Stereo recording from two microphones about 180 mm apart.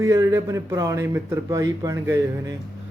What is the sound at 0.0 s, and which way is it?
Speech, 15° right (ahead or behind).